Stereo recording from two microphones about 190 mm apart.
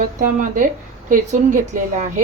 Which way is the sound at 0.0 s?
45° right (ahead or behind).